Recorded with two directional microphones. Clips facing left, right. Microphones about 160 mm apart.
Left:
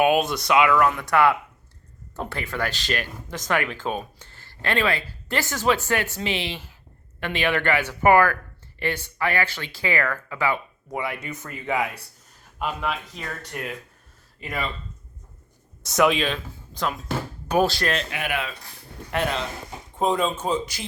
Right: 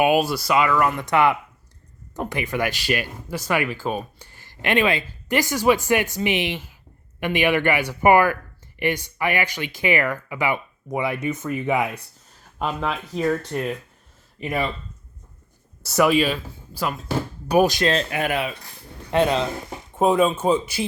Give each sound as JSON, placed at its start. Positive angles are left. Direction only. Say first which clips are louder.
{"t": 0.0, "sound": "speech", "louder": "right 1 dB", "side_deg": -5}
{"t": 0.9, "sound": "speech", "louder": "right 1 dB", "side_deg": -20}
{"t": 12.5, "sound": "speech", "louder": "right 2 dB", "side_deg": -35}
{"t": 15.8, "sound": "speech", "louder": "right 2 dB", "side_deg": -5}
{"t": 17.9, "sound": "speech", "louder": "right 5 dB", "side_deg": -40}
{"t": 19.1, "sound": "speech", "louder": "right 6 dB", "side_deg": -25}